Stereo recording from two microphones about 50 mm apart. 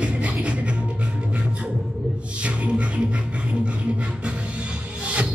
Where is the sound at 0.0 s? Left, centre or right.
Right.